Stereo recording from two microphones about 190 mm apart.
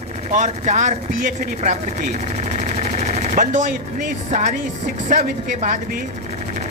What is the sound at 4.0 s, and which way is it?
Speech, 40° right (ahead or behind).